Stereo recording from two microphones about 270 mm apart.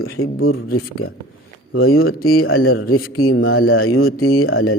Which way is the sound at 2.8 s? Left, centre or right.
Left.